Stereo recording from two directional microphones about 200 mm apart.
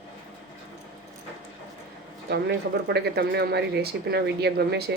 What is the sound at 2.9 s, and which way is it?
Speech, 55° right (ahead or behind).